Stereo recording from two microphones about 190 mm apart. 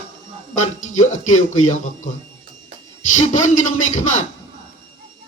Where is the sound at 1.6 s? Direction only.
40° left (ahead or behind).